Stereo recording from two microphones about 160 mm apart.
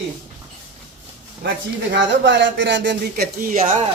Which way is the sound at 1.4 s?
90° right.